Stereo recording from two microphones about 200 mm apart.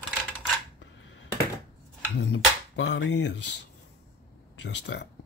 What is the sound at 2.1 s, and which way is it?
Speech, 60° left (ahead or behind).